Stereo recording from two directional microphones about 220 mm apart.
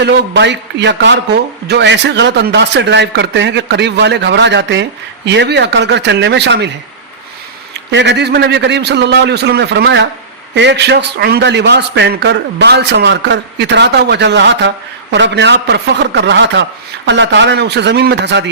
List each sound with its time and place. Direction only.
0.0 s a man's voice: 55° right (ahead or behind)
7.7 s a man's voice: 50° right (ahead or behind)